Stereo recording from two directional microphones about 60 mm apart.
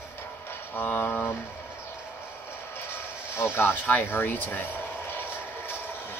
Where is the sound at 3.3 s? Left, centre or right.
Left.